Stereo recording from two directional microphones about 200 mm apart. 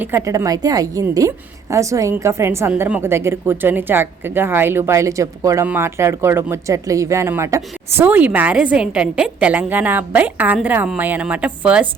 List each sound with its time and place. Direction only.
0.0 s a woman's voice: 15° right (ahead or behind)